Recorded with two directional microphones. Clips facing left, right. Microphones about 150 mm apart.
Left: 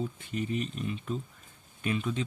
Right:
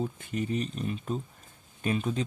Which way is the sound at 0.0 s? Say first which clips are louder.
Right 2 dB; 45° right (ahead or behind).